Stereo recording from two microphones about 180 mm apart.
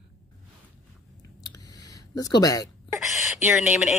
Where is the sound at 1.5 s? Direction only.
20° left (ahead or behind).